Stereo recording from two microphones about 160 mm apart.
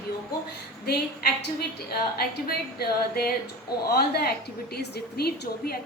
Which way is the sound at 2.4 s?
70° left (ahead or behind).